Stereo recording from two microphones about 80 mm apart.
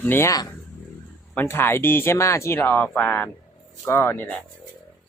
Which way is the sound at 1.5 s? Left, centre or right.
Left.